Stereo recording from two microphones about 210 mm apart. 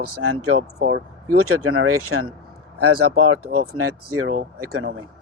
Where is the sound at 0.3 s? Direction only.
85° right.